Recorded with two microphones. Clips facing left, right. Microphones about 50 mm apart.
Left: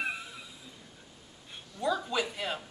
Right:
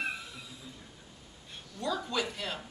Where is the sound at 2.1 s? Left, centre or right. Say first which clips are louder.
Left 2 dB; centre.